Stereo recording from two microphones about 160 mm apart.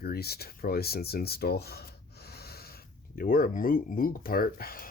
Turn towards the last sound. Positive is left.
turn(degrees=65)  # may be behind; listen again after turning